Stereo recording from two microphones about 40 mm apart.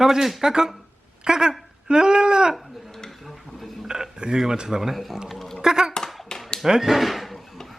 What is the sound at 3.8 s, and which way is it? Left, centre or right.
Speech, centre.